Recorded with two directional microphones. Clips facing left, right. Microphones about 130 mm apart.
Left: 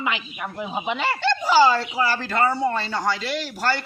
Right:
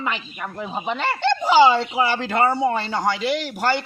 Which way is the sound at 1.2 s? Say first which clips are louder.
Right 3 dB; 20° right (ahead or behind).